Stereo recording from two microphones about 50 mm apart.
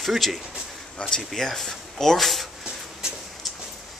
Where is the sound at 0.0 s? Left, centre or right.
Centre.